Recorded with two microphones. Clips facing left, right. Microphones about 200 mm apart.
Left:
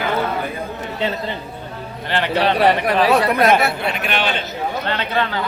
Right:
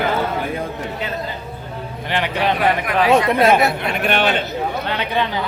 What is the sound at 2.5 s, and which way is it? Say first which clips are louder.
Speech: left 3 dB; 35° left (ahead or behind).